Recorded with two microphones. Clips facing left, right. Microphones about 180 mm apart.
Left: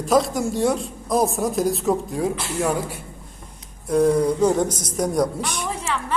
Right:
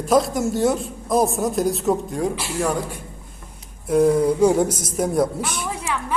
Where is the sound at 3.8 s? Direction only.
5° right (ahead or behind).